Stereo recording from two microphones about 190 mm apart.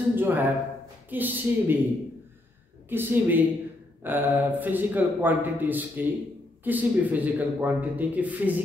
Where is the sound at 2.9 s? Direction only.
10° right (ahead or behind).